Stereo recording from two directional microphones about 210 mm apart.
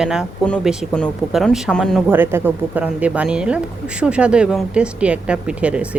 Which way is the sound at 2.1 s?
10° right (ahead or behind).